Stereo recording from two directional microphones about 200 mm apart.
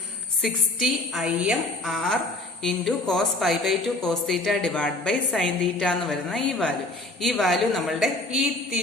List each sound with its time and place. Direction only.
0.4 s a woman's voice: centre (ahead or behind)